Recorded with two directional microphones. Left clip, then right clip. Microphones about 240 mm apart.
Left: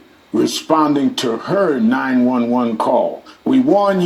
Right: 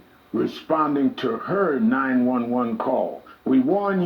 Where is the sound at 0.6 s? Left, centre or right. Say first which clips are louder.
Left 5 dB; left.